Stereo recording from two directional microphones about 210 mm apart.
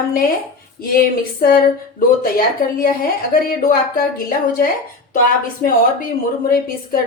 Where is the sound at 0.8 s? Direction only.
45° left (ahead or behind).